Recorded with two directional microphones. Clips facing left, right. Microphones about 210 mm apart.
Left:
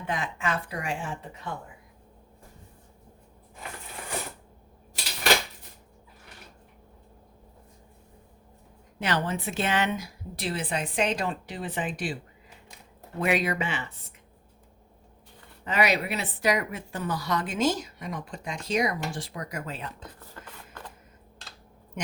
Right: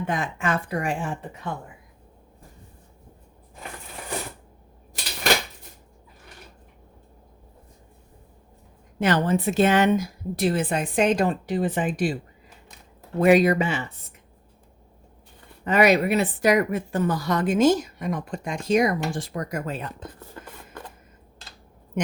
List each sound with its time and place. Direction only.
0.1 s speech: 50° right (ahead or behind)
9.0 s speech: 45° right (ahead or behind)
13.1 s speech: 40° right (ahead or behind)
15.6 s speech: 50° right (ahead or behind)